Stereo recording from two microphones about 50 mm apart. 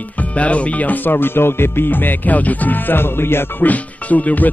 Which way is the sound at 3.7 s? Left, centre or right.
Left.